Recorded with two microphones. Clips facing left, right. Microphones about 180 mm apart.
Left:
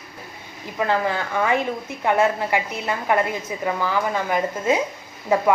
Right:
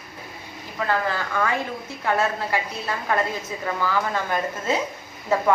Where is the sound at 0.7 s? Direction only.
15° left (ahead or behind).